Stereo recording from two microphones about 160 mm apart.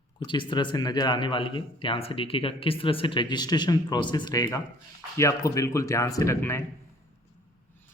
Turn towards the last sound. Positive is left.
turn(degrees=15)  # may be behind; listen again after turning